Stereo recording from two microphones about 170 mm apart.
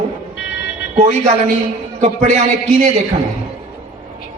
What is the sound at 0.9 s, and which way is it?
A man's voice, 45° right (ahead or behind).